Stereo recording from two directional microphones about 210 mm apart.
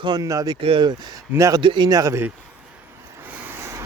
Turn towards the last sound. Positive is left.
turn(degrees=-10)  # may be behind; listen again after turning